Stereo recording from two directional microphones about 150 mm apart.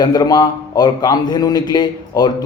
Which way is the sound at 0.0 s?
25° left (ahead or behind).